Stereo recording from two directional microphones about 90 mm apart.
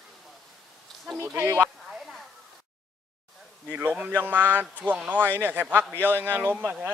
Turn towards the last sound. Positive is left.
turn(degrees=-20)  # may be behind; listen again after turning